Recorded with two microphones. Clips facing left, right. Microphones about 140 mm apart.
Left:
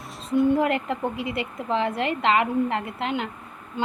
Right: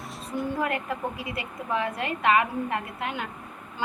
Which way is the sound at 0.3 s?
25° left (ahead or behind).